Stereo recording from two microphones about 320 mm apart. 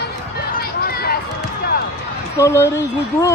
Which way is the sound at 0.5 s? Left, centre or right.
Left.